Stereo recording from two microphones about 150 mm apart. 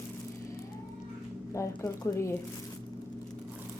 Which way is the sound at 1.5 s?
20° left (ahead or behind).